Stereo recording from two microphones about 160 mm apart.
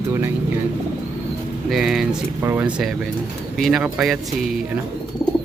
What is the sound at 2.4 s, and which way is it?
Speech, 15° right (ahead or behind).